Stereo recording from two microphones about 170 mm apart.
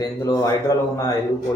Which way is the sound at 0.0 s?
20° left (ahead or behind).